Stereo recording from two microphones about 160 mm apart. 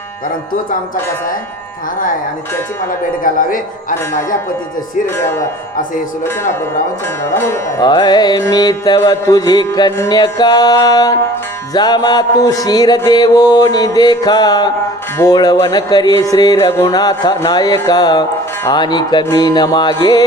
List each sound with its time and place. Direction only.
3.2 s speech: 55° left (ahead or behind)
7.3 s music: 15° left (ahead or behind)
7.9 s speech: 25° left (ahead or behind)